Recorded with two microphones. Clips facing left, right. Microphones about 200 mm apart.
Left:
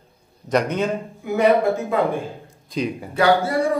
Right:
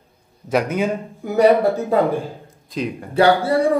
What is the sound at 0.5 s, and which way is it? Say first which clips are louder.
Speech: right 1 dB; 5° right (ahead or behind).